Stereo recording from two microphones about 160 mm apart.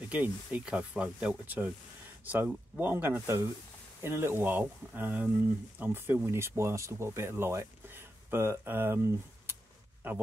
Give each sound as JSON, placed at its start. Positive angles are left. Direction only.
{"t": 0.1, "sound": "speech", "side_deg": -10}